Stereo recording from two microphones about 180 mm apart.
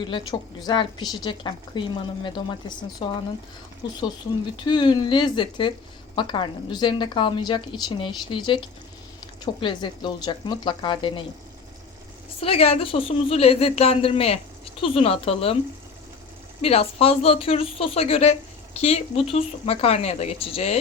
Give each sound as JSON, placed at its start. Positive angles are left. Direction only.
{"t": 0.0, "sound": "a woman's voice", "side_deg": 25}
{"t": 12.4, "sound": "a woman's voice", "side_deg": 30}
{"t": 16.6, "sound": "a woman's voice", "side_deg": 35}